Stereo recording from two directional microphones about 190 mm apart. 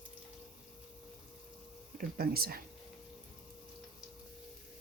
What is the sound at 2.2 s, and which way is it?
Speech, 50° right (ahead or behind).